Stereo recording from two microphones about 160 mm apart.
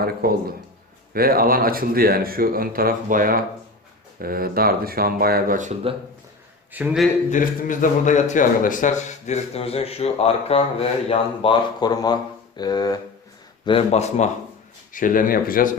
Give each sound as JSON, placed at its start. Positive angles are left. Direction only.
{"t": 0.0, "sound": "speech", "side_deg": -70}
{"t": 6.7, "sound": "speech", "side_deg": 0}
{"t": 7.3, "sound": "speech", "side_deg": 55}
{"t": 11.8, "sound": "speech", "side_deg": 25}
{"t": 13.7, "sound": "speech", "side_deg": 40}
{"t": 14.9, "sound": "speech", "side_deg": 60}